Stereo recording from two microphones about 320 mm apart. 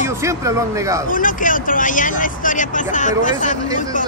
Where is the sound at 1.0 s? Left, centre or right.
Left.